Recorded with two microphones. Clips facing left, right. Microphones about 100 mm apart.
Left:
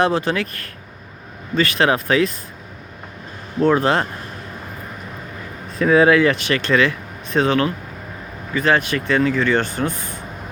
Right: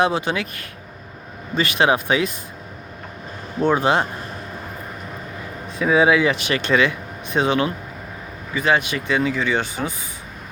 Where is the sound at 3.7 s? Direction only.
20° right (ahead or behind).